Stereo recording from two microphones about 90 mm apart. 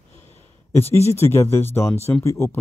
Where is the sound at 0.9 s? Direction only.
30° left (ahead or behind).